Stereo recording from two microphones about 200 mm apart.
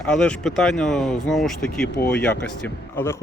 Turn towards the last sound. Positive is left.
turn(degrees=10)  # may be behind; listen again after turning